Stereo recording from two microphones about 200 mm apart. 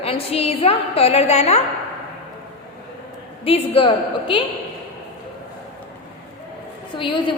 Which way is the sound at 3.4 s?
30° left (ahead or behind).